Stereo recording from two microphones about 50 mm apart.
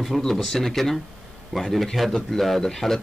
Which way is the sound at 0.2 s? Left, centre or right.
Centre.